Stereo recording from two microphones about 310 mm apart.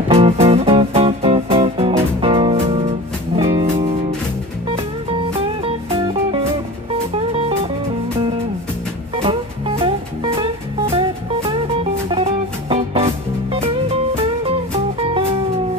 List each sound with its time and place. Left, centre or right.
0.1 s music: centre
9.1 s music: centre